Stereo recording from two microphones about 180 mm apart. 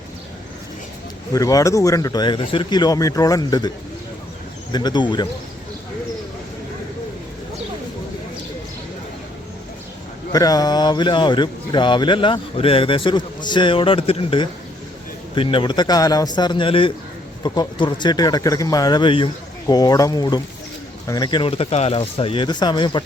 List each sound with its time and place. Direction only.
1.3 s speech: 20° left (ahead or behind)
4.7 s speech: 25° left (ahead or behind)
10.3 s speech: 20° left (ahead or behind)